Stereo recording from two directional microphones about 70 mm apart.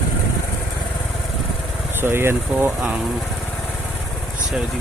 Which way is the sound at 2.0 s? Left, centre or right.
Right.